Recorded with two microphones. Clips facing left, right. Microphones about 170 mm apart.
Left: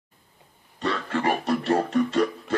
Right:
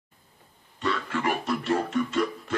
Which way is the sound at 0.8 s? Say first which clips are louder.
Left 2 dB; 35° left (ahead or behind).